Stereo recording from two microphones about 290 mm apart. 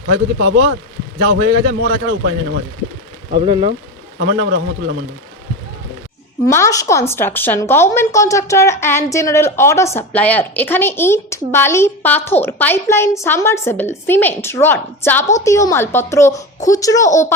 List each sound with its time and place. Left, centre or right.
0.1 s a man's voice: right
1.8 s a man's voice: right
3.3 s speech: centre
4.2 s a man's voice: right
6.5 s a woman's voice: centre